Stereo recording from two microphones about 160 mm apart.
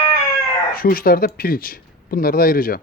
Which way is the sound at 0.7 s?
65° left (ahead or behind).